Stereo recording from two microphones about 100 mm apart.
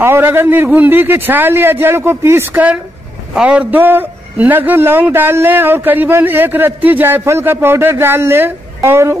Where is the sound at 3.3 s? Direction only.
10° right (ahead or behind); by 9.1 s 25° right (ahead or behind).